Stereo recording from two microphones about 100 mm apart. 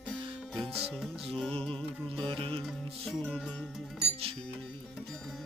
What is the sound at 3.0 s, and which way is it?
Music, 10° left (ahead or behind).